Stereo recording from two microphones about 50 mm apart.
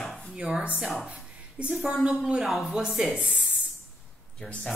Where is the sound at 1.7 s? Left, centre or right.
Centre.